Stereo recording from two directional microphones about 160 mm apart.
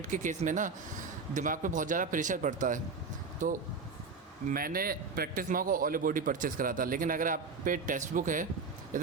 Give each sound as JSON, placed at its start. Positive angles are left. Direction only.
{"t": 0.1, "sound": "a man's voice", "side_deg": -50}
{"t": 4.4, "sound": "a man's voice", "side_deg": -65}